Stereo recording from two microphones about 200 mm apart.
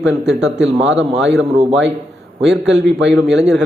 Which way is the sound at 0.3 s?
60° right (ahead or behind).